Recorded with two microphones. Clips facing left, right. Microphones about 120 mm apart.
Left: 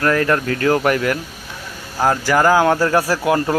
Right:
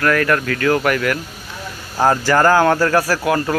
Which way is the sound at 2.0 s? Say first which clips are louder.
Right 1 dB; 5° left (ahead or behind).